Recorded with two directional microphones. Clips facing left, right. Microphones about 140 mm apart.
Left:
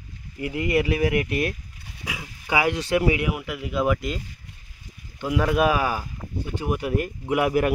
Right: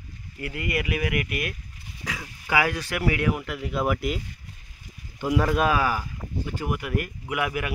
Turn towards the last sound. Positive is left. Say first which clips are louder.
# left 7 dB
turn(degrees=35)  # may be behind; listen again after turning